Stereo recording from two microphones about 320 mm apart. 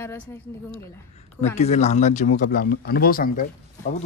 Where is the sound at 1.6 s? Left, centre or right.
Left.